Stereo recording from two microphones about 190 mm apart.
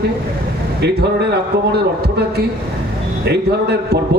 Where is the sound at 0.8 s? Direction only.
60° right (ahead or behind).